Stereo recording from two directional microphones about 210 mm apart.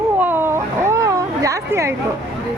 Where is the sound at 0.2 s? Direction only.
10° right (ahead or behind).